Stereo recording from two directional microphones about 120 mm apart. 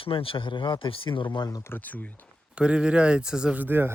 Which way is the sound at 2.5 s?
10° right (ahead or behind).